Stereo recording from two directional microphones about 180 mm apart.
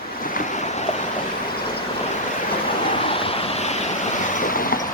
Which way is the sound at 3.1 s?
30° left (ahead or behind).